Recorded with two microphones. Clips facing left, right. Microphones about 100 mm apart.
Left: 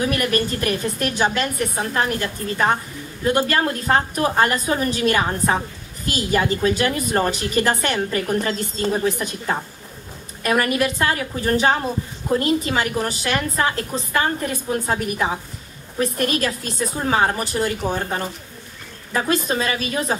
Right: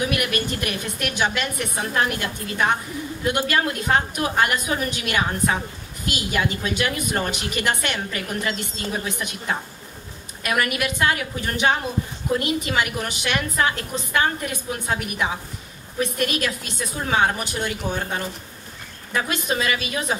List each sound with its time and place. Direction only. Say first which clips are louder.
0.0 s a woman's voice: left 3 dB; 35° left (ahead or behind)